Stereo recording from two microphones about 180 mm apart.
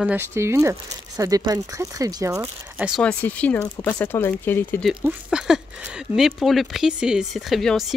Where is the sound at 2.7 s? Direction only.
5° right (ahead or behind); by 4.8 s 10° left (ahead or behind).